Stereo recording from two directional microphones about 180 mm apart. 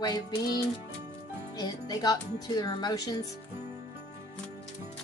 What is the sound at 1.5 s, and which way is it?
Speech, 20° left (ahead or behind).